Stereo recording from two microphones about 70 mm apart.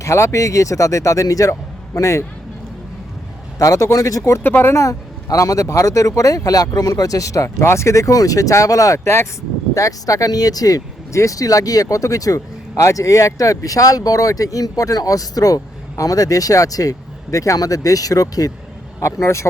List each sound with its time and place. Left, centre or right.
0.0 s speech: left
3.6 s speech: left
4.4 s speech: left
4.7 s speech: left
11.1 s speech: left
18.9 s speech: left